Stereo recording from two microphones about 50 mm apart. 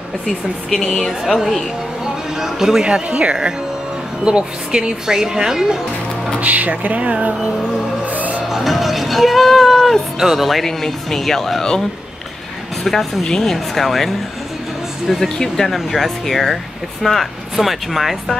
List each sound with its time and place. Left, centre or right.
0.3 s speech: centre
1.3 s speech: centre
2.9 s speech: right
6.4 s music: right
8.5 s music: centre
10.1 s speech: centre
12.8 s speech: centre